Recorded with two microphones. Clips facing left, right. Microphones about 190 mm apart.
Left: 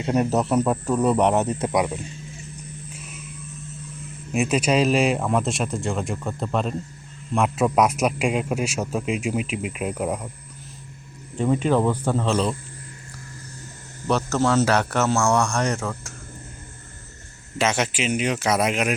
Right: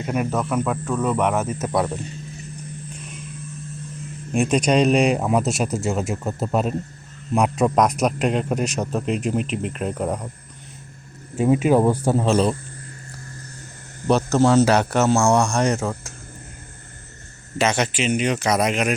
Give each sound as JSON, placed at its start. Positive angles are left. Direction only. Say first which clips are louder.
{"t": 0.0, "sound": "speech", "louder": "left 2 dB", "side_deg": 30}
{"t": 1.7, "sound": "a man's voice", "louder": "right 1 dB", "side_deg": 10}
{"t": 2.9, "sound": "vehicle", "louder": "right 3 dB", "side_deg": 5}
{"t": 4.3, "sound": "a man's voice", "louder": "right 2 dB", "side_deg": 5}
{"t": 11.3, "sound": "speech", "louder": "right 4 dB", "side_deg": -10}
{"t": 14.1, "sound": "a man's voice", "louder": "right 4 dB", "side_deg": -20}
{"t": 17.6, "sound": "speech", "louder": "right 2 dB", "side_deg": 5}